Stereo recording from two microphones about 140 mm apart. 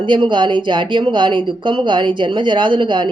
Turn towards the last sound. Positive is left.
turn(degrees=-35)  # may be behind; listen again after turning